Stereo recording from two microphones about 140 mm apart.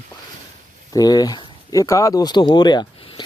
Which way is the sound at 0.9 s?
25° left (ahead or behind).